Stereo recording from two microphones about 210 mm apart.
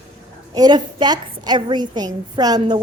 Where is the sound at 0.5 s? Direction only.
20° right (ahead or behind).